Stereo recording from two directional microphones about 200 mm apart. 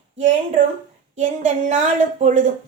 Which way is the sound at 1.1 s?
40° right (ahead or behind).